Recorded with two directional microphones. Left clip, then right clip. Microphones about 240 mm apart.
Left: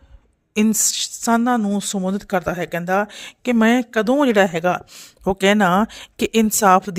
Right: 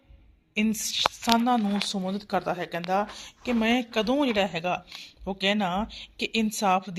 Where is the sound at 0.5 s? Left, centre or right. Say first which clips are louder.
Left 8 dB; left.